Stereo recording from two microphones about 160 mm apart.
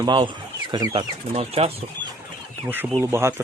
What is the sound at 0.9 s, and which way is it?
Speech, 40° right (ahead or behind).